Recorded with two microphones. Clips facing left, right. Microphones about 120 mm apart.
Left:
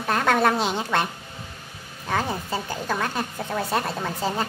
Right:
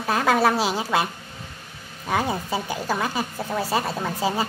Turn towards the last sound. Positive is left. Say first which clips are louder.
# right 2 dB
turn(degrees=-10)  # may be behind; listen again after turning